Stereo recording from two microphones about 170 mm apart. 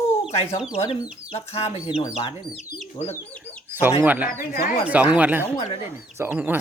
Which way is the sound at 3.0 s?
40° left (ahead or behind).